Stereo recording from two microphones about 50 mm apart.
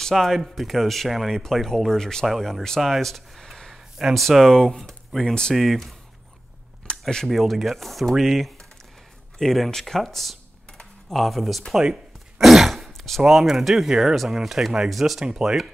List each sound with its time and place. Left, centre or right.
0.1 s speech: centre
1.4 s speech: centre
2.2 s speech: centre
5.6 s speech: centre
6.9 s a sound: centre
7.2 s speech: centre
12.4 s throat clearing: centre
13.2 s speech: centre
15.2 s speech: centre